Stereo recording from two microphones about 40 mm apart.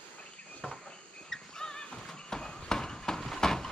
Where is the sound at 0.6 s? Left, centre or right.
Centre.